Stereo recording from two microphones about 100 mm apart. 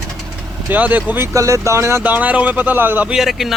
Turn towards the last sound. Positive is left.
turn(degrees=0)  # may be behind; listen again after turning